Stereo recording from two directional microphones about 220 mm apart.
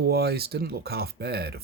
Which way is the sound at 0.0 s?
45° right (ahead or behind).